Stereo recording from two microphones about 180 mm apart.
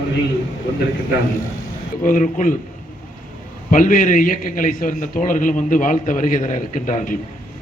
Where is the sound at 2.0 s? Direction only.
45° left (ahead or behind).